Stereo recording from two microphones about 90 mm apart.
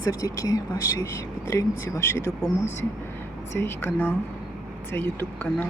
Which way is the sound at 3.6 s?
25° left (ahead or behind).